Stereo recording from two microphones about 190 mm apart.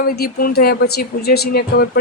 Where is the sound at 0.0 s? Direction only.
50° left (ahead or behind).